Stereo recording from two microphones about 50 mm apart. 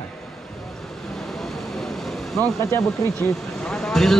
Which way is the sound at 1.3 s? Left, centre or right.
Centre.